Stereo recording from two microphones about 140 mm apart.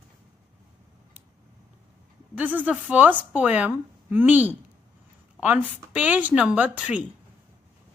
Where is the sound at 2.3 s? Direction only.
10° right (ahead or behind).